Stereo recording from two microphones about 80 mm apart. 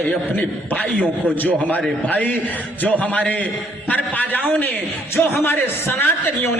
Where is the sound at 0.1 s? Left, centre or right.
Centre.